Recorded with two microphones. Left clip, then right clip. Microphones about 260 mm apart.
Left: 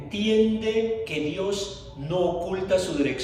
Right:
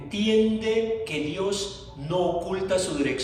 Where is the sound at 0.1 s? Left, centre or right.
Right.